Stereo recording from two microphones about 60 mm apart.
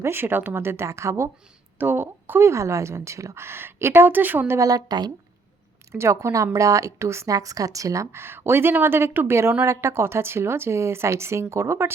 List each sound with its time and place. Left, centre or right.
0.0 s speech: right
0.9 s a woman's voice: right
1.8 s speech: right
2.4 s speech: right
5.9 s a woman's voice: right
7.3 s a woman's voice: right
8.1 s speech: right